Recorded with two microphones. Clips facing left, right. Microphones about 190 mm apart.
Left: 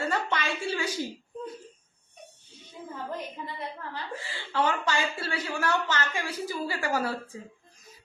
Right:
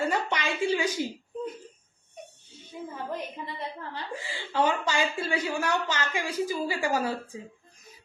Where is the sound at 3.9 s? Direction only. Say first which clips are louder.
Right 1 dB; 15° right (ahead or behind).